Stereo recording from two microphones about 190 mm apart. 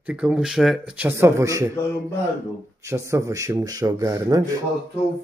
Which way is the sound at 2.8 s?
15° right (ahead or behind).